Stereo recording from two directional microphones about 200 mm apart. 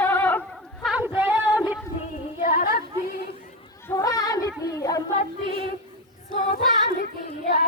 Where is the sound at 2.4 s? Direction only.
45° left (ahead or behind).